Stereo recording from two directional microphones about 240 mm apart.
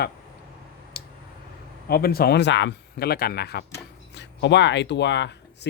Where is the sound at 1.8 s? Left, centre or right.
Left.